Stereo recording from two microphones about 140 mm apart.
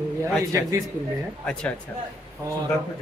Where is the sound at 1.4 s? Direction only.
5° left (ahead or behind).